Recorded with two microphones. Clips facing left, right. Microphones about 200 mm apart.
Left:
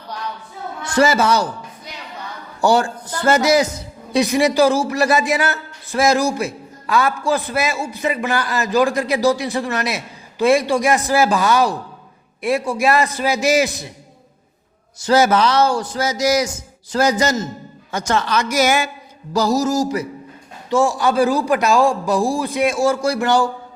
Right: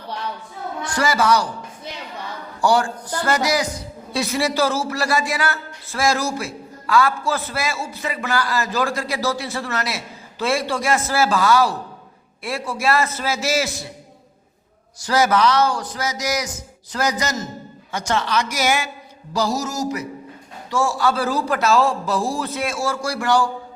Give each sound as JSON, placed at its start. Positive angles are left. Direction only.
{"t": 0.9, "sound": "a man's voice", "side_deg": 25}
{"t": 2.6, "sound": "a man's voice", "side_deg": 25}
{"t": 15.0, "sound": "a man's voice", "side_deg": 25}
{"t": 17.9, "sound": "a woman's voice", "side_deg": 45}
{"t": 19.3, "sound": "a sound", "side_deg": 40}
{"t": 20.7, "sound": "a man's voice", "side_deg": 20}